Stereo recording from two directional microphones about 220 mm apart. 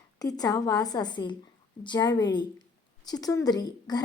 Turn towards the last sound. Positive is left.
turn(degrees=20)  # may be behind; listen again after turning